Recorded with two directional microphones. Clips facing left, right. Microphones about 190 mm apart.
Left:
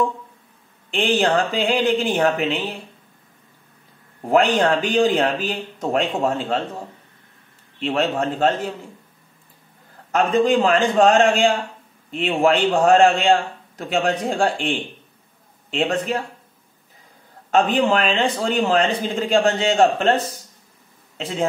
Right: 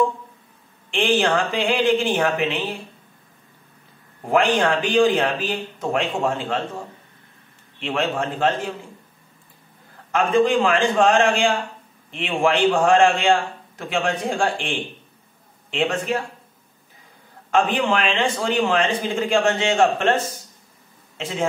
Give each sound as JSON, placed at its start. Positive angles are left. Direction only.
{"t": 0.8, "sound": "a man's voice", "side_deg": 35}
{"t": 4.3, "sound": "a man's voice", "side_deg": 35}
{"t": 7.8, "sound": "a man's voice", "side_deg": 35}
{"t": 10.1, "sound": "a man's voice", "side_deg": 40}
{"t": 15.7, "sound": "a man's voice", "side_deg": 35}
{"t": 17.5, "sound": "a man's voice", "side_deg": 40}